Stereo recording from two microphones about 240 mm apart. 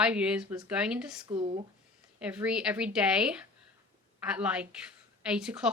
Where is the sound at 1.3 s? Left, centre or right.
Right.